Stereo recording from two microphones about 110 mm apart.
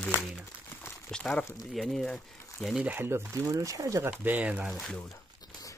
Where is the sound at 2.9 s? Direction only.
20° right (ahead or behind).